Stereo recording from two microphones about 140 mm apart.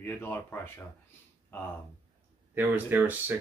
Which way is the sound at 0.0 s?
15° left (ahead or behind).